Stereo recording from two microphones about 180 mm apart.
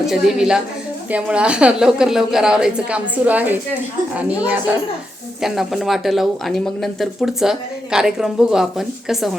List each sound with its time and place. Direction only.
0.0 s a woman's voice: centre (ahead or behind)